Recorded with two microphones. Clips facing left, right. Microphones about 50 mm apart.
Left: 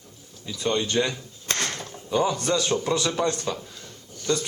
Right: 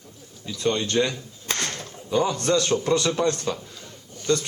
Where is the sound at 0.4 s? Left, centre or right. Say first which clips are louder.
Right 1 dB; centre.